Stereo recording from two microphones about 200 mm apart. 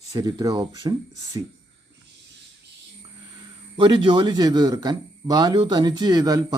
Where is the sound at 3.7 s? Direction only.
25° right (ahead or behind).